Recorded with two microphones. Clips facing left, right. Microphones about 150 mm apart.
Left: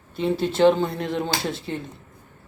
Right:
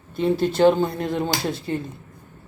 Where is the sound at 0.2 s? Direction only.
5° right (ahead or behind).